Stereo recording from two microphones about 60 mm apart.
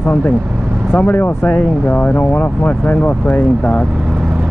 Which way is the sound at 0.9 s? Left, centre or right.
Left.